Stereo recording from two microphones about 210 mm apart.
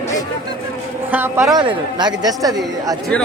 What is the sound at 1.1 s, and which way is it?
Speech, 10° right (ahead or behind).